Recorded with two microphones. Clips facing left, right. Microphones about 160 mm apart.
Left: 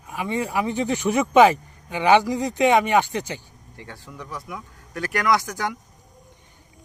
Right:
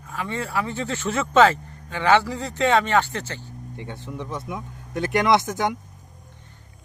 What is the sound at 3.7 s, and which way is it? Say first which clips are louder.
Speech: right 5 dB; 20° right (ahead or behind).